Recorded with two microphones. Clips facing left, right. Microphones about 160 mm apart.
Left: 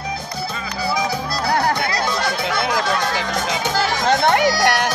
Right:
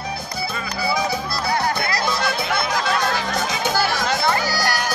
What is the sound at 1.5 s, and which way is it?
Music, 75° left (ahead or behind).